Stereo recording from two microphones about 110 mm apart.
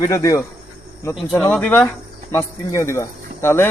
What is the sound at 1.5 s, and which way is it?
Speech, 15° left (ahead or behind).